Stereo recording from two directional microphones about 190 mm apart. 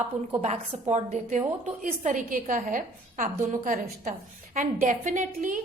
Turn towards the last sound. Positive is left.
turn(degrees=-40)  # may be behind; listen again after turning